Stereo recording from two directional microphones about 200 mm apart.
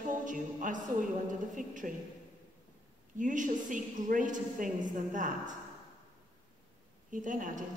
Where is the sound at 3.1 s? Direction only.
40° right (ahead or behind).